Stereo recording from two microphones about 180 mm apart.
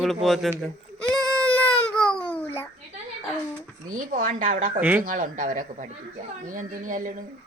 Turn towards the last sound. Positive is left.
turn(degrees=-50)  # may be behind; listen again after turning